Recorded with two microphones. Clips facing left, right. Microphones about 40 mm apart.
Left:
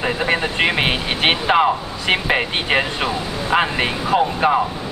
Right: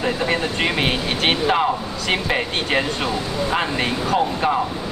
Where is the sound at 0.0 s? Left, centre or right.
Left.